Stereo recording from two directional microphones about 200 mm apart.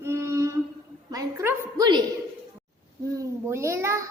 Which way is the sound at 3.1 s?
15° right (ahead or behind).